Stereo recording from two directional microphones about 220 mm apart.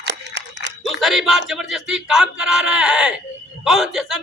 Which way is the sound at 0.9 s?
Centre (ahead or behind).